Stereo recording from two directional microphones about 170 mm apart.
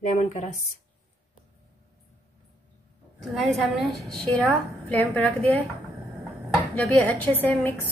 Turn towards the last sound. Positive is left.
turn(degrees=10)  # may be behind; listen again after turning